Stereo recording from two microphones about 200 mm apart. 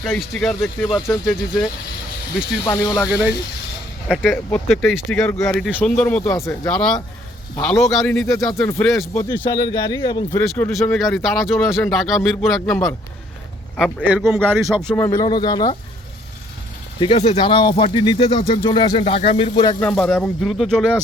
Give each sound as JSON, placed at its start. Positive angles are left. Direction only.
{"t": 0.0, "sound": "speech", "side_deg": 5}
{"t": 0.9, "sound": "speech", "side_deg": 20}
{"t": 2.6, "sound": "a man's voice", "side_deg": 15}
{"t": 4.1, "sound": "speech", "side_deg": 0}
{"t": 6.7, "sound": "a man's voice", "side_deg": 5}
{"t": 9.1, "sound": "speech", "side_deg": 20}
{"t": 10.3, "sound": "speech", "side_deg": 5}
{"t": 14.8, "sound": "speech", "side_deg": 10}
{"t": 17.0, "sound": "speech", "side_deg": 30}
{"t": 19.8, "sound": "speech", "side_deg": 5}